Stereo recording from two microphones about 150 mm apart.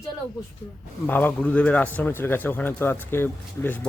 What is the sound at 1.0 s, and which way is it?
Speech, 10° left (ahead or behind).